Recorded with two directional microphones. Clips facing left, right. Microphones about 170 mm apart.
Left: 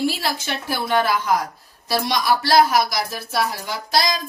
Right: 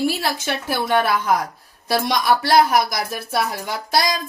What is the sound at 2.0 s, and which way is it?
Speech, 50° right (ahead or behind).